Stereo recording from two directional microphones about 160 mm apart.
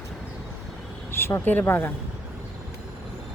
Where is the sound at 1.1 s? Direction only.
15° left (ahead or behind).